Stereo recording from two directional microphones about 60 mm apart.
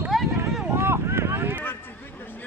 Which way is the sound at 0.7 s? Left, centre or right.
Right.